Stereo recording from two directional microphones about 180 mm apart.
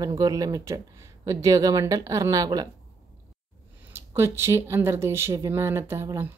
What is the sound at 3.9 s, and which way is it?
Speech, 15° right (ahead or behind).